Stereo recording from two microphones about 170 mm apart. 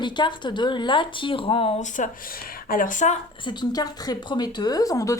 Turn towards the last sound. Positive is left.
turn(degrees=20)  # may be behind; listen again after turning